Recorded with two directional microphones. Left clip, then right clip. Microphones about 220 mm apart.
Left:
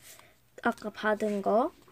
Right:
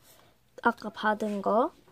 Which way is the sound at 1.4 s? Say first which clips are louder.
Right 2 dB; 10° right (ahead or behind).